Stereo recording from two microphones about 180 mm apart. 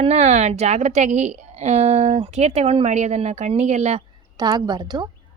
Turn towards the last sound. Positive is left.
turn(degrees=-25)  # may be behind; listen again after turning